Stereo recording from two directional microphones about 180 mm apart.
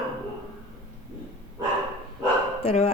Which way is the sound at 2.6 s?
35° left (ahead or behind).